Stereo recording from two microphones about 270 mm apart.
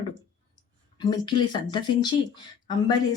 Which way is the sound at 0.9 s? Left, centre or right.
Centre.